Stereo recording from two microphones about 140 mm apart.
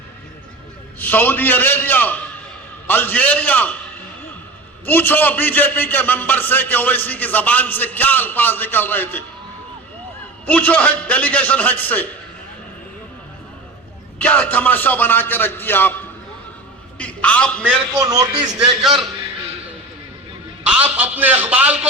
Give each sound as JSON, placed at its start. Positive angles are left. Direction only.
{"t": 0.9, "sound": "a man's voice", "side_deg": 15}
{"t": 4.9, "sound": "a man's voice", "side_deg": 15}
{"t": 10.4, "sound": "a man's voice", "side_deg": 10}
{"t": 14.2, "sound": "a man's voice", "side_deg": 10}
{"t": 18.0, "sound": "a man's voice", "side_deg": -25}
{"t": 20.7, "sound": "a man's voice", "side_deg": -10}